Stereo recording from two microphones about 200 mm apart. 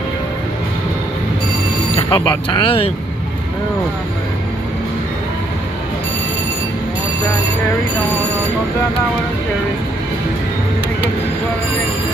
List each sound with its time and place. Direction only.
2.0 s speech: 20° left (ahead or behind)